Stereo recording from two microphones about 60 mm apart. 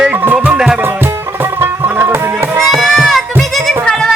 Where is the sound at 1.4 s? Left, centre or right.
Right.